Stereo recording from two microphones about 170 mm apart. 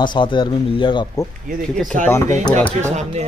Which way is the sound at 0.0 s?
25° left (ahead or behind).